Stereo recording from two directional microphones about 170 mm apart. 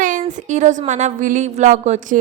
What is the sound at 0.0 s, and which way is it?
A woman's voice, 50° right (ahead or behind).